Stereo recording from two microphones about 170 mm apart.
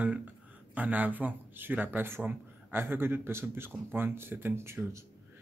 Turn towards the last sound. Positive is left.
turn(degrees=-15)  # may be behind; listen again after turning